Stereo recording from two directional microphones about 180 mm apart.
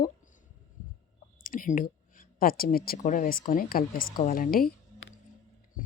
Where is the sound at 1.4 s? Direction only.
50° left (ahead or behind).